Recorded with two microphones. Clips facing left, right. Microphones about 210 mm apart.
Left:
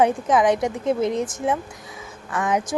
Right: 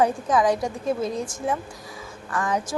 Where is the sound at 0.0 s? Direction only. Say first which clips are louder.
Left 2 dB; 20° left (ahead or behind).